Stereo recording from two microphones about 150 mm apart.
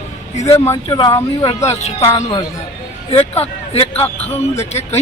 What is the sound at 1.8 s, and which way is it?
Speech, 45° left (ahead or behind).